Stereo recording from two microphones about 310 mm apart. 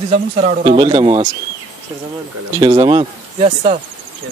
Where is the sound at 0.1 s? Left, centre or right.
Right.